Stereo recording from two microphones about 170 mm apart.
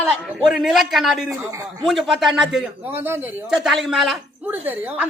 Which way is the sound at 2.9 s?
10° right (ahead or behind).